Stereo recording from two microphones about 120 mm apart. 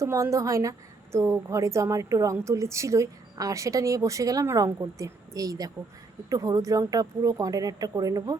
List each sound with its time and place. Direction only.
0.0 s a woman's voice: 25° right (ahead or behind)